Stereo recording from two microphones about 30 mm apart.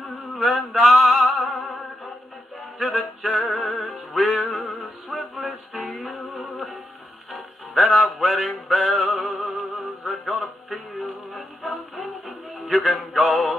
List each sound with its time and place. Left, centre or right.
0.0 s music: centre
2.8 s music: centre